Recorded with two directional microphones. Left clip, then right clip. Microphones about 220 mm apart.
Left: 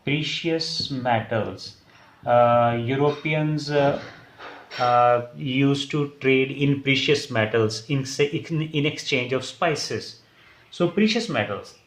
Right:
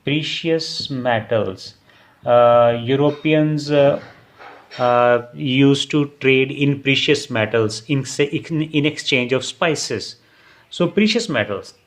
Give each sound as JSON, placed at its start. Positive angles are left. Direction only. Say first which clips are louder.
{"t": 0.0, "sound": "speech", "louder": "right 4 dB", "side_deg": -45}